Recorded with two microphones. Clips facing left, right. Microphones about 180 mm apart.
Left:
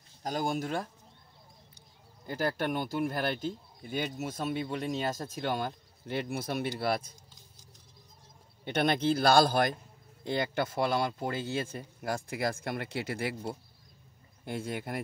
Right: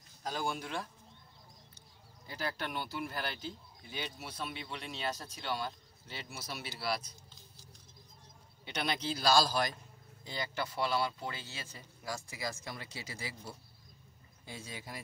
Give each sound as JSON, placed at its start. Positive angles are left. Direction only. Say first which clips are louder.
{"t": 0.2, "sound": "speech", "louder": "left 6 dB", "side_deg": 40}
{"t": 2.2, "sound": "speech", "louder": "left 8 dB", "side_deg": 50}
{"t": 8.6, "sound": "speech", "louder": "left 9 dB", "side_deg": 55}